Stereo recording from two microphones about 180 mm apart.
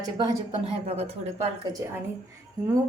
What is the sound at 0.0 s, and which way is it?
A woman's voice, 25° right (ahead or behind).